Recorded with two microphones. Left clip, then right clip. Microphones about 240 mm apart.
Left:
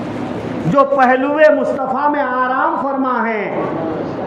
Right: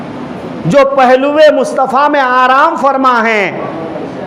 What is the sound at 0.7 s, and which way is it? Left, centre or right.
A man's voice, right.